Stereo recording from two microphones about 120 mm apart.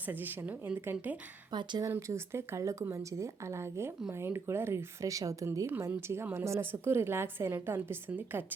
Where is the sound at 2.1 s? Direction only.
25° right (ahead or behind).